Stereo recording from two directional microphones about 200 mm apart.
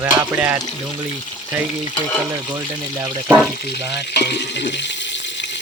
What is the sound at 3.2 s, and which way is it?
Speech, 5° right (ahead or behind).